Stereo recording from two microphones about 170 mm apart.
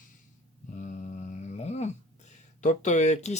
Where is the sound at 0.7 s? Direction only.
45° left (ahead or behind).